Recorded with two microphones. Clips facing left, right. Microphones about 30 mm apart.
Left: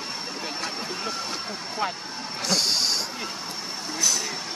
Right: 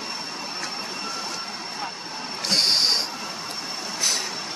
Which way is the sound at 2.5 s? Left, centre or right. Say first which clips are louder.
Right 3 dB; right.